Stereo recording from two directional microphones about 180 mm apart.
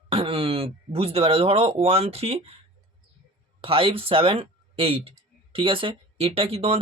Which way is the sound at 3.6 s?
30° right (ahead or behind).